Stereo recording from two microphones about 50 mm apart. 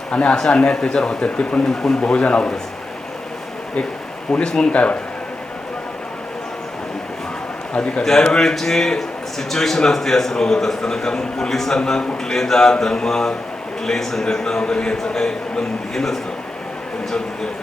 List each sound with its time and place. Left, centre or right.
0.1 s speech: left
1.6 s speech: centre
4.3 s speech: centre
7.8 s a man's voice: centre